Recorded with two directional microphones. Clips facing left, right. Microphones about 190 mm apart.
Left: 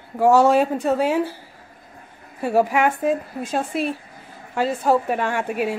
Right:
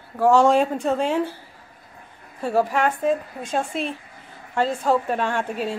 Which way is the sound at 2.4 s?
10° left (ahead or behind).